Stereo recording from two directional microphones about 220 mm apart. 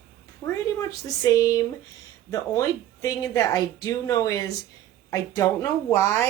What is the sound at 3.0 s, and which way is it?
A woman's voice, 15° left (ahead or behind).